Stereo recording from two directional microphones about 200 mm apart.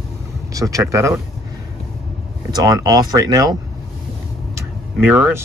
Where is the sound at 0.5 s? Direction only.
15° right (ahead or behind).